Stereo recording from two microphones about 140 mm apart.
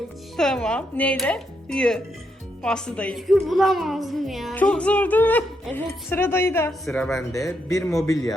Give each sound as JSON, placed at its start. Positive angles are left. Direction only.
{"t": 0.3, "sound": "a woman's voice", "side_deg": 5}
{"t": 6.8, "sound": "a woman's voice", "side_deg": 5}
{"t": 7.2, "sound": "speech", "side_deg": 25}